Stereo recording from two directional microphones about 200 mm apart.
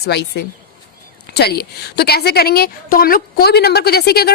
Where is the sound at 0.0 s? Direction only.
55° left (ahead or behind).